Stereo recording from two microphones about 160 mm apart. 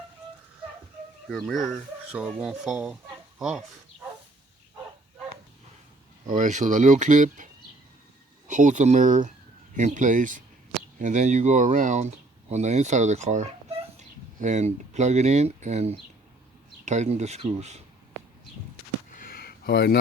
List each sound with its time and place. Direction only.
1.3 s speech: centre (ahead or behind)
6.3 s speech: 50° right (ahead or behind)
19.3 s a sound: 75° left (ahead or behind)